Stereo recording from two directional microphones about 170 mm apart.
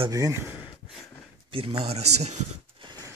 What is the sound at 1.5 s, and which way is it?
Speech, 30° right (ahead or behind).